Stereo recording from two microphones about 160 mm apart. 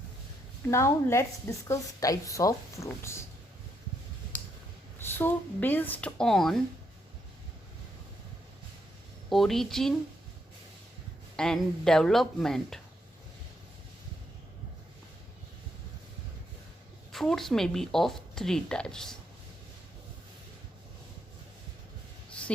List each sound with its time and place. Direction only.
0.7 s a woman's voice: 15° left (ahead or behind)
4.9 s speech: 15° left (ahead or behind)
9.3 s a woman's voice: centre (ahead or behind)
11.3 s a woman's voice: 5° left (ahead or behind)
17.1 s a woman's voice: centre (ahead or behind)
22.3 s a sound: 5° left (ahead or behind)